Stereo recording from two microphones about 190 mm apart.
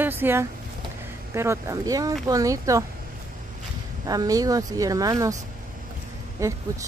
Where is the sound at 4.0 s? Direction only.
20° right (ahead or behind).